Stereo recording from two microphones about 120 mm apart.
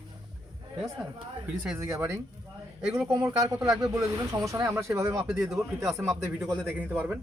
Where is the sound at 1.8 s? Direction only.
25° right (ahead or behind).